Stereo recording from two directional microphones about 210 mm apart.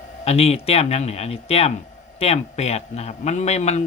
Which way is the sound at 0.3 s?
30° left (ahead or behind).